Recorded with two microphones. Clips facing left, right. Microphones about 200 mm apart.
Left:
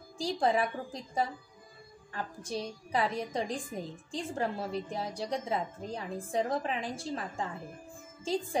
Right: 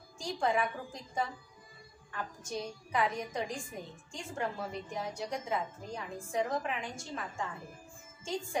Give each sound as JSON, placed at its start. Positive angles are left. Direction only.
{"t": 0.2, "sound": "a woman's voice", "side_deg": 35}